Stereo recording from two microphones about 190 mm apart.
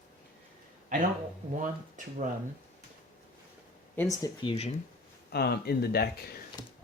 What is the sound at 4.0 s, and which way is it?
Speech, 15° left (ahead or behind).